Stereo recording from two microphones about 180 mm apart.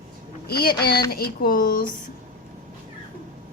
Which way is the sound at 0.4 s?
60° left (ahead or behind).